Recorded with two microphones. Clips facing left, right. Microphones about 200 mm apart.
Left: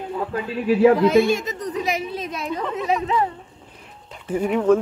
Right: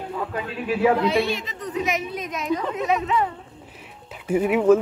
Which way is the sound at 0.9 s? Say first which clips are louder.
Left 5 dB; 45° left (ahead or behind).